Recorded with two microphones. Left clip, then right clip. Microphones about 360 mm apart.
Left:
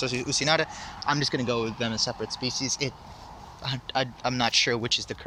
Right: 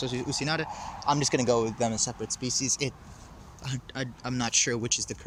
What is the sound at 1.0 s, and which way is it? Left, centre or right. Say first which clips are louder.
Speech: right 1 dB; centre.